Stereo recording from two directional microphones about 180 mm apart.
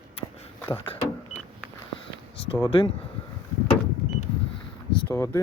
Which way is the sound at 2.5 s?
30° left (ahead or behind).